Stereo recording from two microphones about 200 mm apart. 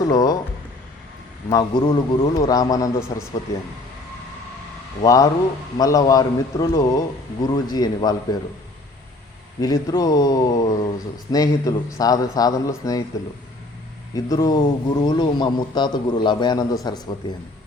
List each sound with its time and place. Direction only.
0.0 s speech: 20° left (ahead or behind)
1.5 s a man's voice: 20° left (ahead or behind)
5.0 s a man's voice: 20° left (ahead or behind)
9.6 s speech: 20° left (ahead or behind)
14.3 s a man's voice: 20° left (ahead or behind)